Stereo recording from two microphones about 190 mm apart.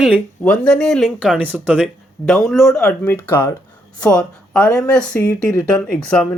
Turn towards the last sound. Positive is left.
turn(degrees=5)  # may be behind; listen again after turning